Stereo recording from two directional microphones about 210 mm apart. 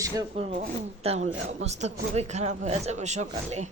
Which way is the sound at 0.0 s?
15° right (ahead or behind).